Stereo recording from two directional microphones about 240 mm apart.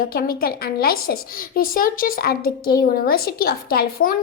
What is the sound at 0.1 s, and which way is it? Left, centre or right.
A woman's voice, left.